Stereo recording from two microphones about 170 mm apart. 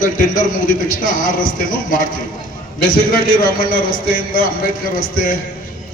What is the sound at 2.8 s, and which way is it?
A man's voice, 55° left (ahead or behind).